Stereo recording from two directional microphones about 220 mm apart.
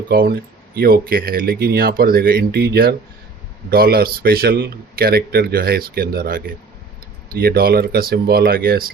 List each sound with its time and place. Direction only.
0.1 s speech: 45° right (ahead or behind)